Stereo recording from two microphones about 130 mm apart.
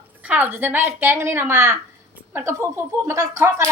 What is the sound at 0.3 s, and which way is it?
A woman's voice, 15° right (ahead or behind).